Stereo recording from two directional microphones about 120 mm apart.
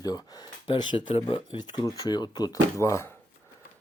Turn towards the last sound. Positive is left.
turn(degrees=25)  # may be behind; listen again after turning